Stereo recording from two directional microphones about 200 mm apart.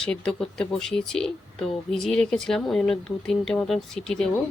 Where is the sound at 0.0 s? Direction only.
5° left (ahead or behind).